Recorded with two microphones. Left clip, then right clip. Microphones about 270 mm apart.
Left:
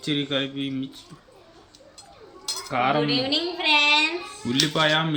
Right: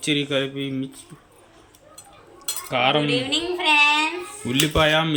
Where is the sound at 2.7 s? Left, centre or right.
Centre.